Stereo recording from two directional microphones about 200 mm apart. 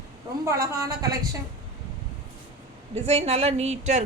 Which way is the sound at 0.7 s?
15° right (ahead or behind).